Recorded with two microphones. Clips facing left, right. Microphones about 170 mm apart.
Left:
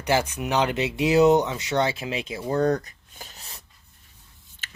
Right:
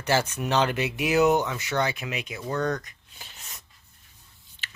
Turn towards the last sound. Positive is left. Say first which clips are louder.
# left 3 dB
turn(degrees=35)  # may be behind; listen again after turning